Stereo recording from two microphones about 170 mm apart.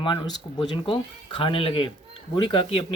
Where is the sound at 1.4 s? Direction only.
30° left (ahead or behind).